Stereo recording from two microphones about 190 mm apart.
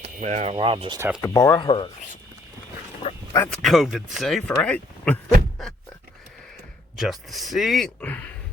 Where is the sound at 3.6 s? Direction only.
Centre (ahead or behind).